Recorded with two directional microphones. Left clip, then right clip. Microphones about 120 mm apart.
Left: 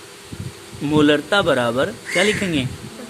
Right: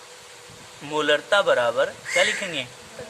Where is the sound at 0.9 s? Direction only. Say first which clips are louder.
Left 4 dB; 15° left (ahead or behind).